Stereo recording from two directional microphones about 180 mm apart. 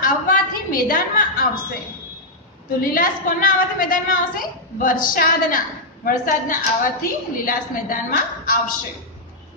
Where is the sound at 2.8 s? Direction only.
50° left (ahead or behind).